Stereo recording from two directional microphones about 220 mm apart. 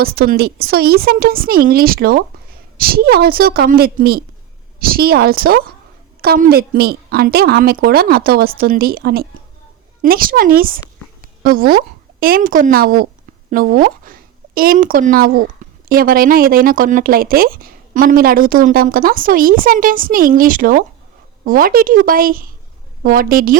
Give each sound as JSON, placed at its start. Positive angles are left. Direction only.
{"t": 0.0, "sound": "a woman's voice", "side_deg": -45}